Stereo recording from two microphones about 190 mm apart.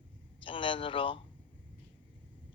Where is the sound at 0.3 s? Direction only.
25° left (ahead or behind).